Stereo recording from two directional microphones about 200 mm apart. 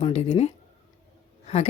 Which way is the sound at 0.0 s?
30° left (ahead or behind).